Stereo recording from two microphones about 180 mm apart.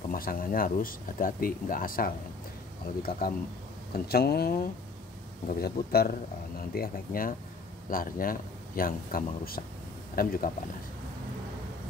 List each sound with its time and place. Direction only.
0.1 s speech: 50° left (ahead or behind)
5.6 s speech: 60° left (ahead or behind)